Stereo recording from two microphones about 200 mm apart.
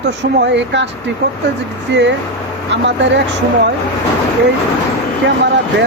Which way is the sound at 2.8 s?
60° right (ahead or behind).